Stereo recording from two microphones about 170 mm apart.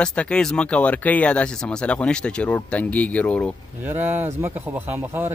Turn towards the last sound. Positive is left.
turn(degrees=-10)  # may be behind; listen again after turning